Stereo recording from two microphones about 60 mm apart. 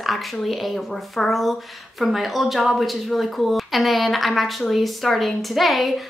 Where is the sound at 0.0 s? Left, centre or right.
Centre.